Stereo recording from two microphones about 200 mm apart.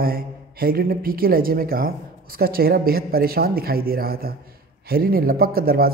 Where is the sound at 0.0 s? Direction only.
50° right (ahead or behind).